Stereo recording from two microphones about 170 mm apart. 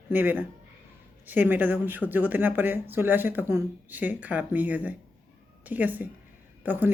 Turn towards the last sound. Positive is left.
turn(degrees=-10)  # may be behind; listen again after turning